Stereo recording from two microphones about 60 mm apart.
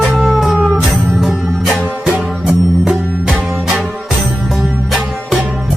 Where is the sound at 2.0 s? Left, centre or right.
Centre.